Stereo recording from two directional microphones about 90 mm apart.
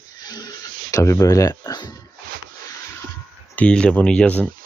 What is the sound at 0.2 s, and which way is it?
Speech, 45° left (ahead or behind).